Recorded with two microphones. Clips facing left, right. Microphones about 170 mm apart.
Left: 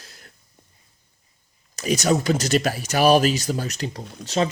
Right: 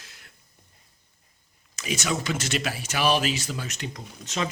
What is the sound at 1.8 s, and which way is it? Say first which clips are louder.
Speech: left 8 dB; 40° left (ahead or behind).